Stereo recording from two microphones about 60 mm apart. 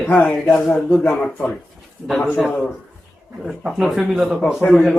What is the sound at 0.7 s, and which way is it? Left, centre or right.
Speech, left.